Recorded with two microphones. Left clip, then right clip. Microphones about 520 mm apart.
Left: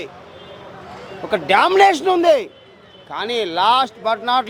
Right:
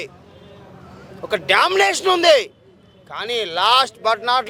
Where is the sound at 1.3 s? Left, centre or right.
Right.